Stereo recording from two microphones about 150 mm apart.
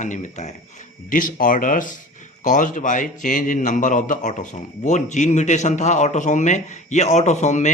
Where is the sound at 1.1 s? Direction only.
65° left (ahead or behind).